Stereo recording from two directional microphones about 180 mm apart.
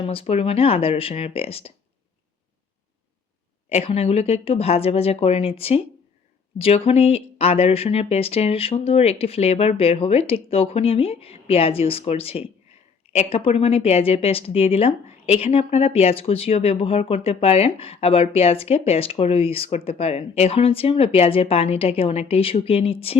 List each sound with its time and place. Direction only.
0.0 s speech: 30° left (ahead or behind)
3.7 s speech: 35° left (ahead or behind)